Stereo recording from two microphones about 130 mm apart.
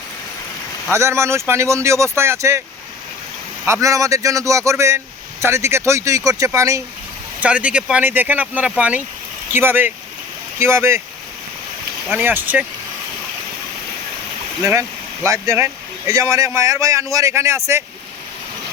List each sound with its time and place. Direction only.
0.9 s speech: 20° right (ahead or behind)
3.7 s speech: 25° right (ahead or behind)
7.4 s speech: 10° right (ahead or behind)
12.1 s speech: 15° right (ahead or behind)
14.7 s speech: 20° right (ahead or behind)